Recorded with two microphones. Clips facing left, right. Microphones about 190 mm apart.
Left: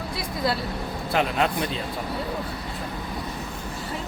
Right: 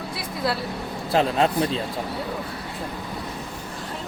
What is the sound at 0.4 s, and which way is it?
Speech, centre (ahead or behind).